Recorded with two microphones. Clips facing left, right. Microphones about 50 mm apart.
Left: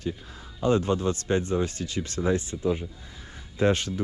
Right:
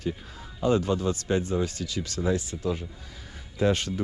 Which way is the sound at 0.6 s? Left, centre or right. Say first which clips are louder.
Left 1 dB; left.